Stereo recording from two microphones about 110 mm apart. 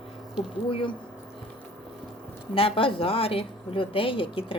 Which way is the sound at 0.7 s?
55° left (ahead or behind).